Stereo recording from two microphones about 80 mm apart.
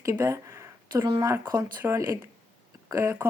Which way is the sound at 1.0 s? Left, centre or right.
Right.